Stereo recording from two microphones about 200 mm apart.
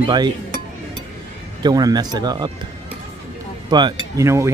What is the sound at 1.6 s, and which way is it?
Speech, 20° right (ahead or behind).